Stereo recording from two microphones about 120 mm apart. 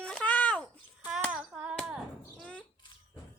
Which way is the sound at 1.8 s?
10° right (ahead or behind).